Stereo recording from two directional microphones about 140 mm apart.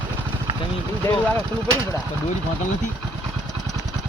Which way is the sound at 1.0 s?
15° left (ahead or behind).